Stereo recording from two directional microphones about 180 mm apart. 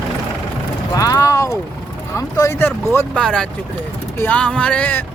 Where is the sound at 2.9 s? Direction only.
5° left (ahead or behind).